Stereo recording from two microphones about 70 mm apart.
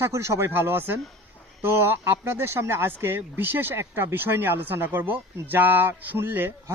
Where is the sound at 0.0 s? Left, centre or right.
Right.